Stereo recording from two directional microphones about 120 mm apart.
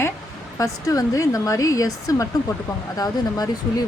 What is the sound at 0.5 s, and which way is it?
Speech, 30° left (ahead or behind).